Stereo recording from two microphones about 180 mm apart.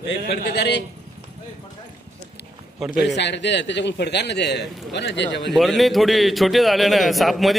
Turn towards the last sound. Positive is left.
turn(degrees=0)  # may be behind; listen again after turning